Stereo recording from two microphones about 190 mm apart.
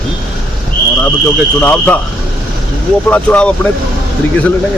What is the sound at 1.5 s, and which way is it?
Speech, 10° left (ahead or behind).